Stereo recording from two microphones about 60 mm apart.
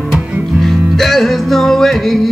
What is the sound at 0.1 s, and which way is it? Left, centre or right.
Music, centre.